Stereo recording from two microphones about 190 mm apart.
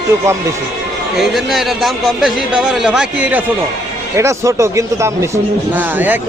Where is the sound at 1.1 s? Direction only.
Centre (ahead or behind).